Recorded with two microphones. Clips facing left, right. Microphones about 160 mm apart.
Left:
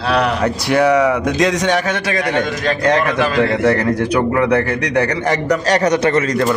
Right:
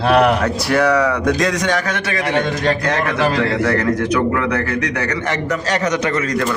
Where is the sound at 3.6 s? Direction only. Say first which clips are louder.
Left 2 dB; 30° left (ahead or behind).